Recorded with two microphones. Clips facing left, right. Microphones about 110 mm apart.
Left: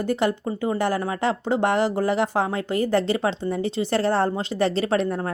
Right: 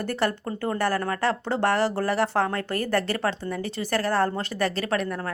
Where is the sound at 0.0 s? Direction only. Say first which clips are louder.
Left 4 dB; 15° left (ahead or behind).